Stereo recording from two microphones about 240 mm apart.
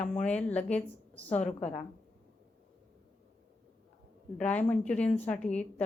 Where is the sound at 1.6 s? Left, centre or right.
Left.